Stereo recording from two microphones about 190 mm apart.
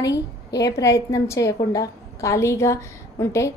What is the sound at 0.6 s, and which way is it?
A woman's voice, 15° left (ahead or behind).